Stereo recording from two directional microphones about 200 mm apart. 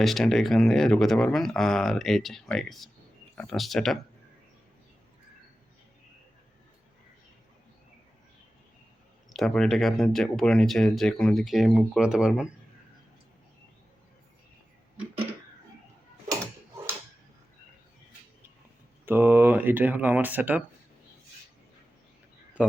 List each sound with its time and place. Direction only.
0.0 s speech: centre (ahead or behind)
9.3 s speech: centre (ahead or behind)
19.0 s speech: 10° right (ahead or behind)